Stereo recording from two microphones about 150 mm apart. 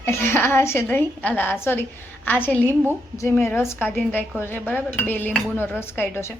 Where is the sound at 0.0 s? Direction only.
15° left (ahead or behind).